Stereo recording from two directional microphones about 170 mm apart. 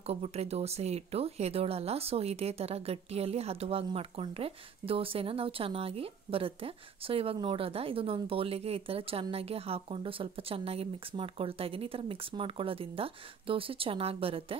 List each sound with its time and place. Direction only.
0.0 s speech: 35° right (ahead or behind)